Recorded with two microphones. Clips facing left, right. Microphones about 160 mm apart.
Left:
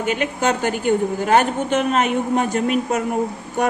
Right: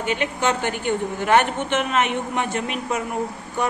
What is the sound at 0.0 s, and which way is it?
A man's voice, 45° left (ahead or behind).